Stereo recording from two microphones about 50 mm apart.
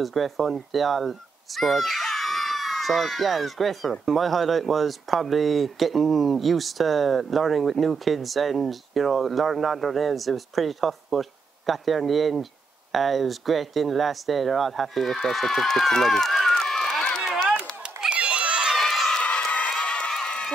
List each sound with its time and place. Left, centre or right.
0.0 s speech: centre
18.1 s crowd: right
18.8 s crowd: centre
19.2 s crowd: left